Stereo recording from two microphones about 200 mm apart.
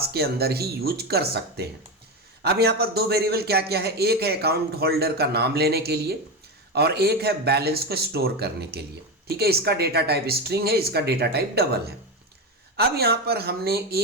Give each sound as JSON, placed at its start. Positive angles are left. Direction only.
{"t": 0.0, "sound": "a man's voice", "side_deg": -50}